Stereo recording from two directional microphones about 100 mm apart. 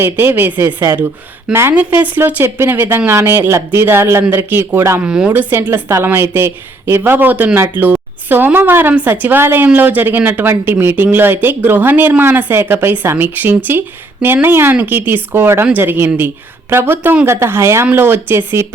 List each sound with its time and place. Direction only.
0.0 s speech: 20° right (ahead or behind)
5.0 s speech: 10° right (ahead or behind)
5.3 s speech: 20° right (ahead or behind)